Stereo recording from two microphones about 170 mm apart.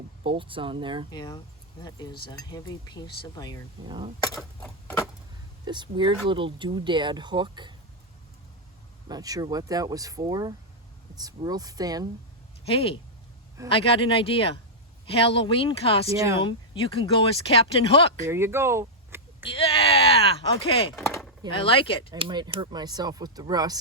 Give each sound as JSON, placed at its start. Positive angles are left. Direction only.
{"t": 0.3, "sound": "speech", "side_deg": -30}
{"t": 1.1, "sound": "speech", "side_deg": 25}
{"t": 3.8, "sound": "speech", "side_deg": -30}
{"t": 4.6, "sound": "a sound", "side_deg": 15}
{"t": 5.6, "sound": "speech", "side_deg": -25}
{"t": 9.0, "sound": "speech", "side_deg": -20}
{"t": 12.6, "sound": "speech", "side_deg": 35}
{"t": 16.0, "sound": "speech", "side_deg": -20}
{"t": 16.4, "sound": "speech", "side_deg": 30}
{"t": 18.3, "sound": "a sound", "side_deg": -15}
{"t": 19.5, "sound": "speech", "side_deg": 30}
{"t": 22.1, "sound": "speech", "side_deg": -25}